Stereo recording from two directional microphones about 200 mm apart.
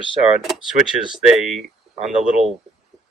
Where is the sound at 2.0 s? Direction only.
35° right (ahead or behind).